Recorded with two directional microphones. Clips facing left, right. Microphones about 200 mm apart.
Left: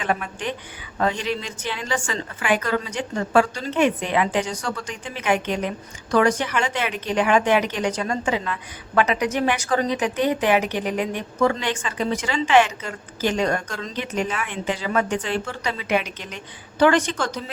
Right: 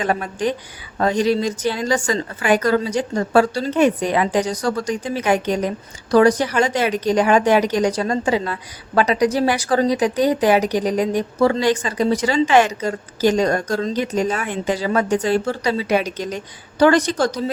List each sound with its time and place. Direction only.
0.0 s a woman's voice: 40° right (ahead or behind)